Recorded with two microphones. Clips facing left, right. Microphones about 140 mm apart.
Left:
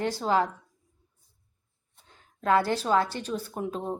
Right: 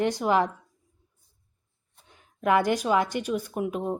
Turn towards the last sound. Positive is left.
turn(degrees=-10)  # may be behind; listen again after turning